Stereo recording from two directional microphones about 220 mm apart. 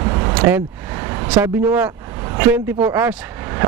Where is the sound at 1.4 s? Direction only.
10° right (ahead or behind).